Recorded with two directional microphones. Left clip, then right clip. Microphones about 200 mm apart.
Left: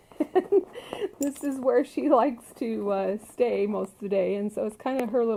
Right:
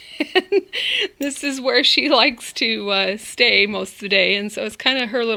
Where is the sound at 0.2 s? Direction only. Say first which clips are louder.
Right 5 dB; 15° right (ahead or behind).